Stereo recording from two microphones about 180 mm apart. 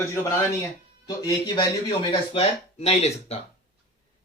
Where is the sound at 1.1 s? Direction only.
20° left (ahead or behind); by 3.4 s 35° left (ahead or behind).